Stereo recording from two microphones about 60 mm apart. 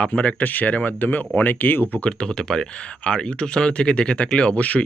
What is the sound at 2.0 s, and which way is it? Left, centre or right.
Speech, centre.